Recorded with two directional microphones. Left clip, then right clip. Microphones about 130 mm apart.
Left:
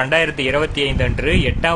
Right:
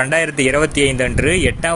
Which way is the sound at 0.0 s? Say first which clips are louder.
Right 1 dB; 35° right (ahead or behind).